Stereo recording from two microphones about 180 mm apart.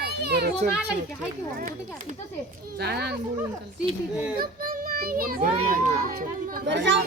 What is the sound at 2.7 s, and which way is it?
Speech, 65° right (ahead or behind).